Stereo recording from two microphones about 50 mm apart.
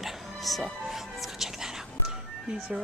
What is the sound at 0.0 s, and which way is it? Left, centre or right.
Music, centre.